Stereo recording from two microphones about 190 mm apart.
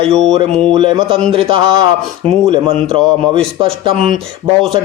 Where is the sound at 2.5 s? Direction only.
30° right (ahead or behind).